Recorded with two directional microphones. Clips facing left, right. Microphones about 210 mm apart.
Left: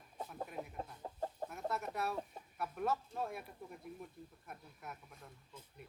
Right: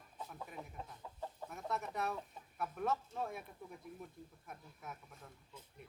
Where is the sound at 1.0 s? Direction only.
45° left (ahead or behind).